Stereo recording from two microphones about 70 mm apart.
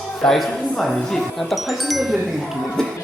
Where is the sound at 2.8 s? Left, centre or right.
Centre.